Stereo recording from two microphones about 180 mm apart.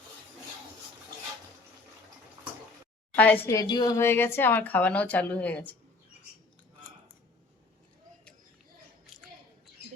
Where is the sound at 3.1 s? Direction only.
10° left (ahead or behind).